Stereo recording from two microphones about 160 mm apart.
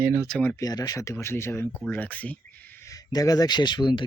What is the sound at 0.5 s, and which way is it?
Speech, 20° left (ahead or behind).